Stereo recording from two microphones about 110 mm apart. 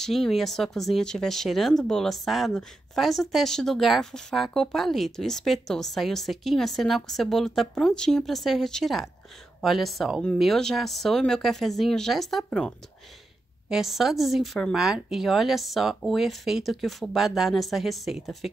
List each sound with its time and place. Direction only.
0.0 s speech: centre (ahead or behind)